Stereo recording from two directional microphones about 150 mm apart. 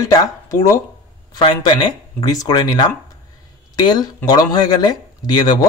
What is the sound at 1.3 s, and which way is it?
Speech, 30° left (ahead or behind).